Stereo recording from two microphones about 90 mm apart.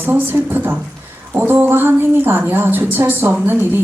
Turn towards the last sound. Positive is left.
turn(degrees=-25)  # may be behind; listen again after turning